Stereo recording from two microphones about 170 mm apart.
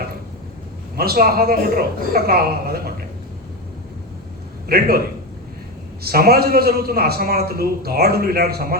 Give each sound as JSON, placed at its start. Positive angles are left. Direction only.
{"t": 0.9, "sound": "a man's voice", "side_deg": -65}
{"t": 4.7, "sound": "a man's voice", "side_deg": -65}
{"t": 6.0, "sound": "a man's voice", "side_deg": -65}